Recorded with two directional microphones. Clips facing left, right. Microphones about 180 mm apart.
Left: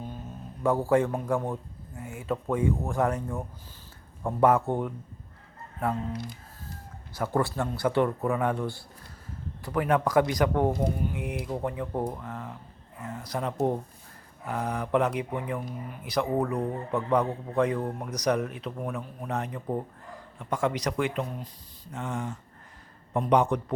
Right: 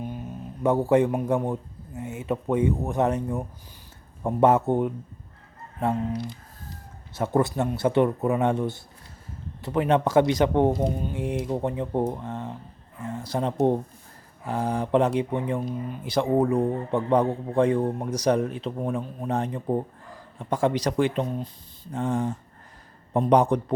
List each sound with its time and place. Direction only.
0.6 s speech: 20° right (ahead or behind)
7.1 s speech: 20° right (ahead or behind)